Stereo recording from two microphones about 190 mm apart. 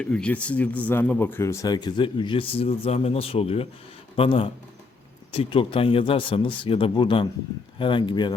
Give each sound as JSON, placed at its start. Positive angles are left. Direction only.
{"t": 0.0, "sound": "speech", "side_deg": 5}